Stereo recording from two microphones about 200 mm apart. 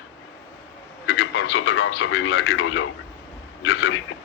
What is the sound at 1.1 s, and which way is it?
A man's voice, 90° left.